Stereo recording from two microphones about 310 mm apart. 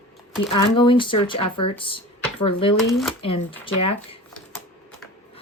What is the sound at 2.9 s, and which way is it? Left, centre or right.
Speech, centre.